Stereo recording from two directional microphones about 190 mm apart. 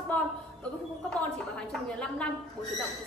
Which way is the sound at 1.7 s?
5° left (ahead or behind).